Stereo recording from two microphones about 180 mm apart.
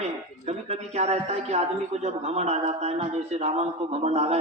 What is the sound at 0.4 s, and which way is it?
A man's voice, 35° right (ahead or behind).